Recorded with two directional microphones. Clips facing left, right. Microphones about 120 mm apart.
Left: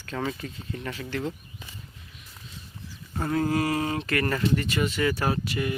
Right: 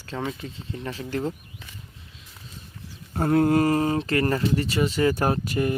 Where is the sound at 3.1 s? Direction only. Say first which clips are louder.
Right 6 dB; 45° right (ahead or behind).